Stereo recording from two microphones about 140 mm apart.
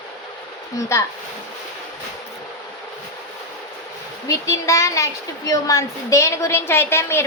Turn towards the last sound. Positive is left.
turn(degrees=15)  # may be behind; listen again after turning